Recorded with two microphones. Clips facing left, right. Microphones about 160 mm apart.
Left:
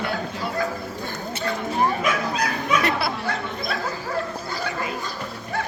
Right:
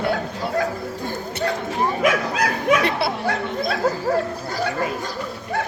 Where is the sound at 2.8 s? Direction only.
25° right (ahead or behind).